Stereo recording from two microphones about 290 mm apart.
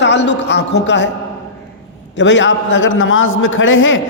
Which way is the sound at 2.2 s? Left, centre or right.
Left.